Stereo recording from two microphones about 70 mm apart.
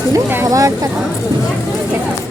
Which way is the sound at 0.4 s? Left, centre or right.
Right.